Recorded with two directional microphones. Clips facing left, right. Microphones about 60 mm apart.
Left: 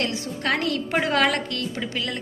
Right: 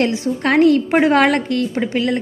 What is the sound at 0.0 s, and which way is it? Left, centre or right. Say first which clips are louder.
A woman's voice: right 9 dB; right.